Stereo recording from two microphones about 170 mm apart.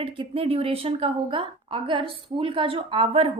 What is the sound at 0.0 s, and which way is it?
A woman's voice, 30° right (ahead or behind).